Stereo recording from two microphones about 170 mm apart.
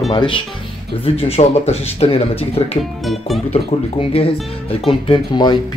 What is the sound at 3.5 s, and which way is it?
Speech, 35° left (ahead or behind).